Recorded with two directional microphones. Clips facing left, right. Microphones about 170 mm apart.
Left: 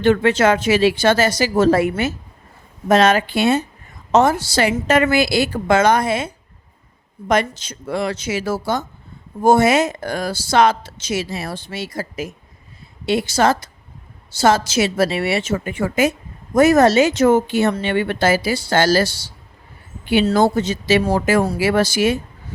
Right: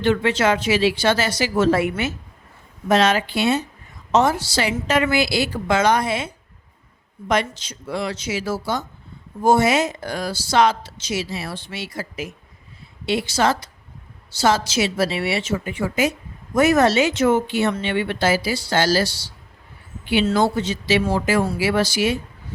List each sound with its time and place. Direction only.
0.0 s speech: 50° left (ahead or behind)